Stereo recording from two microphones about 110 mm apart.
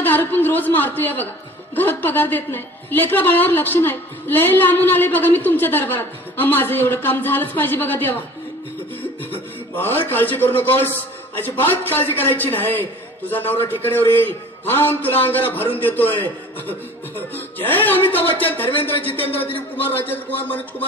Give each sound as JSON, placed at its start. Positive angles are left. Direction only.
{"t": 0.0, "sound": "a woman's voice", "side_deg": 15}
{"t": 9.8, "sound": "a man's voice", "side_deg": 20}